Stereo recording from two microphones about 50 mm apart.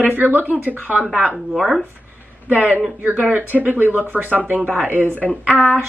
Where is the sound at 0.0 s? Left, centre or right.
Right.